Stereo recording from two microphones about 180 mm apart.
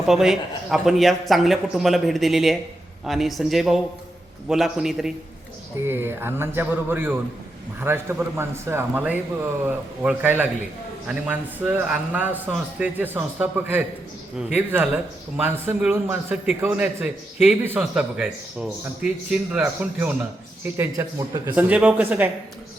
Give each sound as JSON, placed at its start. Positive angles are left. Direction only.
{"t": 0.0, "sound": "a man's voice", "side_deg": 0}